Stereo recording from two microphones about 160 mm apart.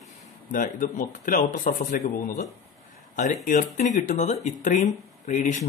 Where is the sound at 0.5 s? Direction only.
55° left (ahead or behind).